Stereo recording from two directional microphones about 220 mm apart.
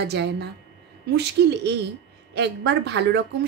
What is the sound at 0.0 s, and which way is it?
Speech, 50° right (ahead or behind).